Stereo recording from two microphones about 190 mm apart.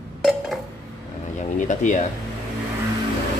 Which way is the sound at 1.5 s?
40° left (ahead or behind).